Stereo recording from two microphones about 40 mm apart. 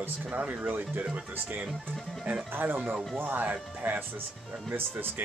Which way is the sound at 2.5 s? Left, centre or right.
Right.